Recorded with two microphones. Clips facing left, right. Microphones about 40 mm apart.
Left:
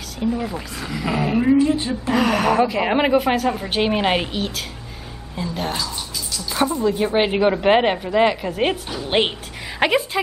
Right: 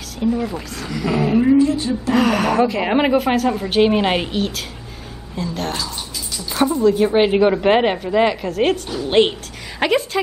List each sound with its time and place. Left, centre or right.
0.2 s a woman's voice: centre
1.6 s a woman's voice: left
2.1 s a woman's voice: centre